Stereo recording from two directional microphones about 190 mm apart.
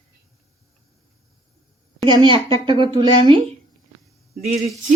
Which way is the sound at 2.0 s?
25° right (ahead or behind).